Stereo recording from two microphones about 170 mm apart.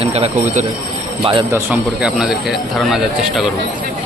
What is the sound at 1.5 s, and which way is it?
Speech, 10° right (ahead or behind).